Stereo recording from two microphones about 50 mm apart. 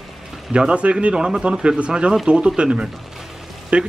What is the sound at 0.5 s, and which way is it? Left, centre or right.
Speech, right.